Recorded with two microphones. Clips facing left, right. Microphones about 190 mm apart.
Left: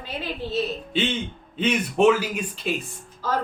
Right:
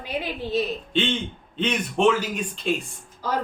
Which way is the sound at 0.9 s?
5° left (ahead or behind).